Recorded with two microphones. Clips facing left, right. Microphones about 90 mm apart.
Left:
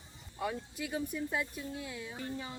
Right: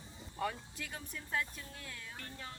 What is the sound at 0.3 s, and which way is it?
Speech, 10° left (ahead or behind).